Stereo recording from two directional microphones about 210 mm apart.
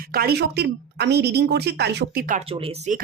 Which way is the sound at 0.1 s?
45° right (ahead or behind).